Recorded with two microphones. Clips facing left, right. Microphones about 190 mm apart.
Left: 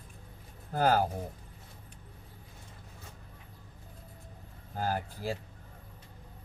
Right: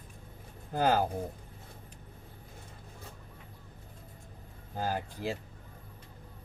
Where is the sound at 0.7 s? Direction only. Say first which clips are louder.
Left 1 dB; 20° right (ahead or behind).